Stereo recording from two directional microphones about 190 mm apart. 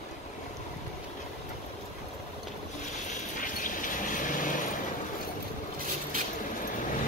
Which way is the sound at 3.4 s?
45° left (ahead or behind).